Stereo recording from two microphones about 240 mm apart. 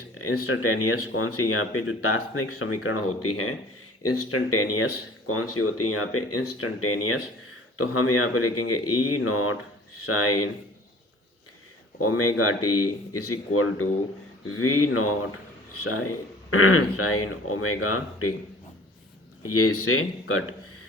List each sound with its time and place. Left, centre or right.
0.3 s speech: left
11.9 s speech: left
19.5 s speech: left